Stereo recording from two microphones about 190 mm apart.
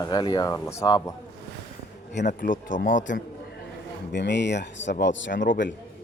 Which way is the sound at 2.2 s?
45° left (ahead or behind).